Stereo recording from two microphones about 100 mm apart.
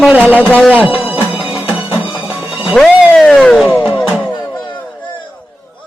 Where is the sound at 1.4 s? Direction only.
20° right (ahead or behind).